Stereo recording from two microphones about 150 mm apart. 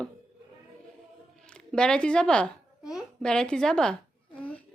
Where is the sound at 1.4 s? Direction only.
5° left (ahead or behind).